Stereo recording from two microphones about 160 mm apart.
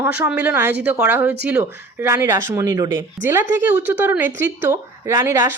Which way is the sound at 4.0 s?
10° right (ahead or behind).